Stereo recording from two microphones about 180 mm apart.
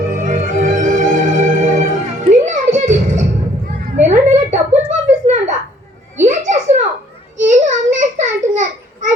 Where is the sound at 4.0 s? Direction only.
40° right (ahead or behind).